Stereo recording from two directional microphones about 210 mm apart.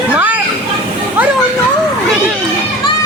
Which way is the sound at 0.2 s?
10° right (ahead or behind).